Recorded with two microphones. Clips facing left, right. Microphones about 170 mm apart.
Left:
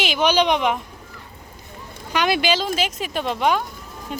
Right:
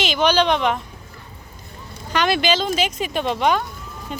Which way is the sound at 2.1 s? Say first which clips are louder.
Right 1 dB; 10° left (ahead or behind).